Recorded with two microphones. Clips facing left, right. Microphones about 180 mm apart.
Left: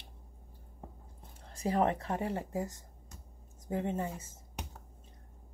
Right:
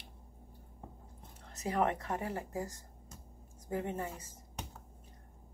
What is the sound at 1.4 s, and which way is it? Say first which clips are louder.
Speech: left 3 dB; 30° left (ahead or behind).